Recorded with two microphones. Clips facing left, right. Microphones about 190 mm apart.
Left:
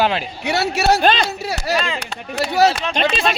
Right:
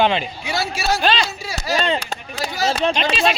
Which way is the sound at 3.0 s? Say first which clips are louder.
Left 3 dB; 50° left (ahead or behind).